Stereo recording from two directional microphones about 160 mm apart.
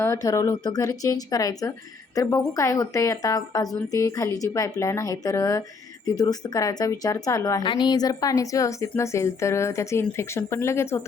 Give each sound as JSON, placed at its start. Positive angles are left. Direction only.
{"t": 0.0, "sound": "speech", "side_deg": 20}